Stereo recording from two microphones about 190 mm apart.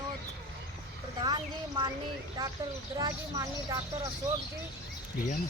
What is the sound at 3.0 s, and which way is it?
Speech, 20° right (ahead or behind).